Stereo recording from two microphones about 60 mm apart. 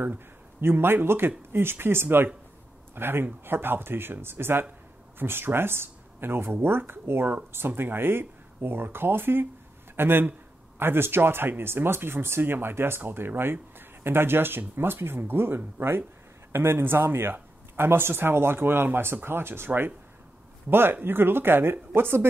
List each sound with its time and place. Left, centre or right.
0.0 s speech: right